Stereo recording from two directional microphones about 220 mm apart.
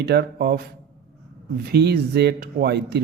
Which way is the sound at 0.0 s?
50° right (ahead or behind).